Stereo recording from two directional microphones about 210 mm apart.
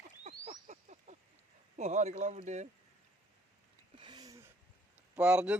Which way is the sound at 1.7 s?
35° right (ahead or behind).